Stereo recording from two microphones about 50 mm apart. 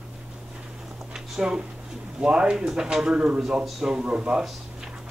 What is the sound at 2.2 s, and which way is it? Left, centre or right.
Speech, centre.